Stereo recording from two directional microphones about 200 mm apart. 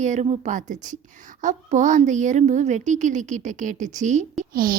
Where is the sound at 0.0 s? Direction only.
35° right (ahead or behind).